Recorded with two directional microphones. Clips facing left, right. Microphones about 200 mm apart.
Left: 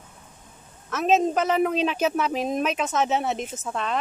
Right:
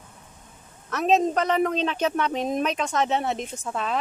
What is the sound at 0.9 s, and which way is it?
A man's voice, centre (ahead or behind).